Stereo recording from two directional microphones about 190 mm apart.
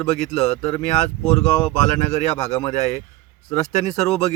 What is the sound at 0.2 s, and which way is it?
Speech, 30° left (ahead or behind).